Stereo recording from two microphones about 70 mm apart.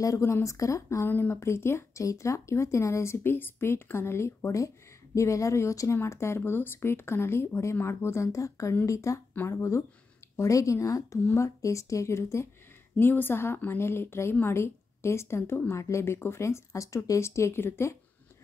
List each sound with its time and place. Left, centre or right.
0.0 s speech: left
1.0 s speech: left
1.3 s speech: left
13.0 s speech: left